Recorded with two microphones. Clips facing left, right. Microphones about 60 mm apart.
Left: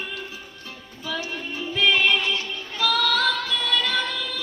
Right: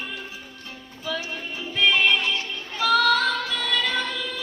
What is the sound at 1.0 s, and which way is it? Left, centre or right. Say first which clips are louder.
Music: even; centre.